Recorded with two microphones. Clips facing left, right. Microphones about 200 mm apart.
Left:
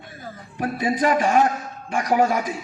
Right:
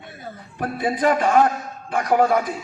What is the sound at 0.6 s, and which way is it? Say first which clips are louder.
A man's voice: right 1 dB; 55° right (ahead or behind).